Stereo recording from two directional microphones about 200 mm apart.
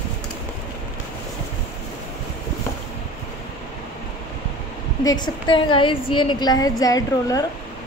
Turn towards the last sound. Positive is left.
turn(degrees=15)  # may be behind; listen again after turning